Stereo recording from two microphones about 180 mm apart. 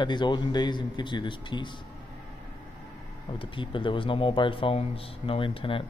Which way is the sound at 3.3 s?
30° left (ahead or behind).